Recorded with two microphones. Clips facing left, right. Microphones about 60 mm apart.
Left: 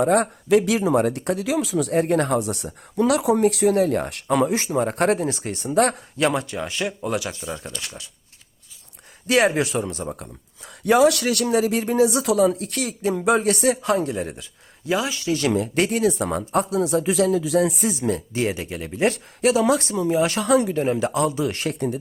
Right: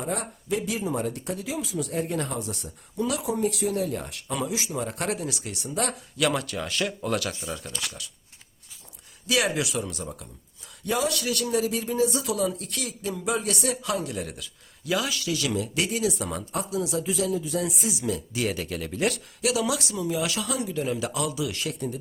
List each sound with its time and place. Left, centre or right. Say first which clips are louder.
0.0 s speech: left 12 dB; left
6.1 s speech: left 2 dB; left
9.2 s speech: left 7 dB; left
10.8 s speech: left 10 dB; left
12.5 s speech: left 7 dB; left
15.4 s speech: left 9 dB; left
17.7 s speech: left 6 dB; left
18.5 s speech: left 1 dB; left
19.4 s speech: left 8 dB; left